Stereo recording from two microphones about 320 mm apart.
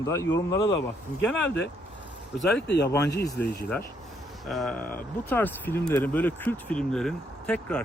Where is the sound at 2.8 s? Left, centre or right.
Centre.